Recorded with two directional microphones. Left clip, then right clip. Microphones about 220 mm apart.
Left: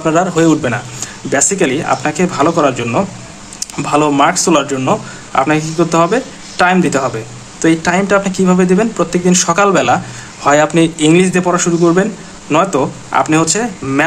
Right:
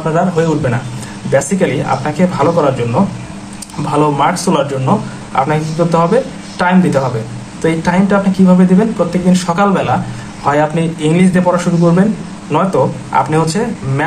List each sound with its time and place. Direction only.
0.0 s a man's voice: 45° left (ahead or behind)